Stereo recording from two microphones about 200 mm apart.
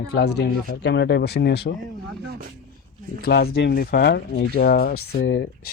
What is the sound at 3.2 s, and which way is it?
Speech, 55° left (ahead or behind).